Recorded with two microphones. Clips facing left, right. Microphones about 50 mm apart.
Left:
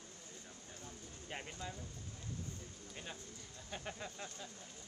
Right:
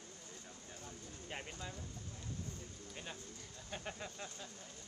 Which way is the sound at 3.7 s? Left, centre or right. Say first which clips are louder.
Even; centre.